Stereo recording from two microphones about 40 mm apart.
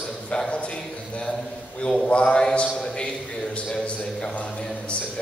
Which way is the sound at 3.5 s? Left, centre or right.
Left.